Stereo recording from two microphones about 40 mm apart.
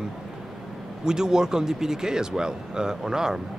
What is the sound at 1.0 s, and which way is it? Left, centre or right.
Speech, centre.